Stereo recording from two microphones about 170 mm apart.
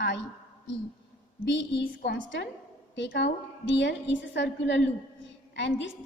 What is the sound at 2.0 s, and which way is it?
A woman's voice, 85° left.